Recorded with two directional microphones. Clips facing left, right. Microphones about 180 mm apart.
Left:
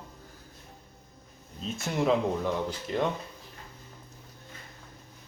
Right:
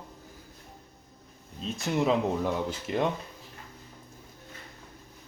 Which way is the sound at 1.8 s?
Centre (ahead or behind).